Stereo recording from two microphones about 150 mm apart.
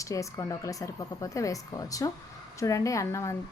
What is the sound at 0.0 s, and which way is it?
Speech, 20° left (ahead or behind).